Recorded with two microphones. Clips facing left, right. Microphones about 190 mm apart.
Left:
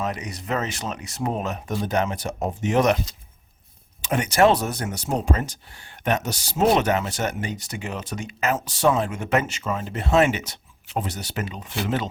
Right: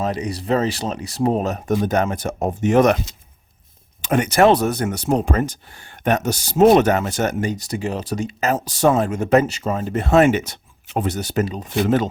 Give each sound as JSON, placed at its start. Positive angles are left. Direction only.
{"t": 0.0, "sound": "speech", "side_deg": -30}
{"t": 4.0, "sound": "speech", "side_deg": -55}
{"t": 6.1, "sound": "speech", "side_deg": -50}